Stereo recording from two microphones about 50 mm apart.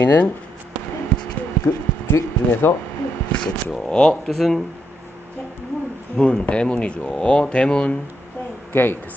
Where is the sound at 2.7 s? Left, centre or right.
Left.